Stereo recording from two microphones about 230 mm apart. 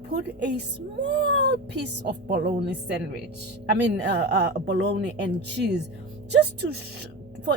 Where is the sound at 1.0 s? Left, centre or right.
Right.